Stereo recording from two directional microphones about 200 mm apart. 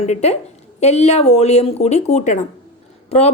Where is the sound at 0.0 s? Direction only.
35° left (ahead or behind).